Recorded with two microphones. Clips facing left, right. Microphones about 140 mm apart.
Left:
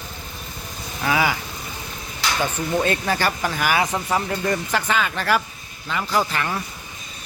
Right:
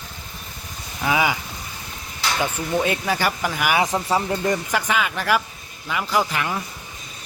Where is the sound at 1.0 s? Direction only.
15° right (ahead or behind).